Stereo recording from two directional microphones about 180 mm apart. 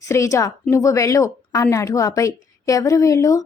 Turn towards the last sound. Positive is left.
turn(degrees=15)  # may be behind; listen again after turning